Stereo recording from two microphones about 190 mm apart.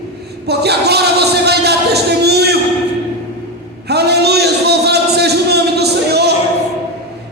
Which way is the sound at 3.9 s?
60° right (ahead or behind).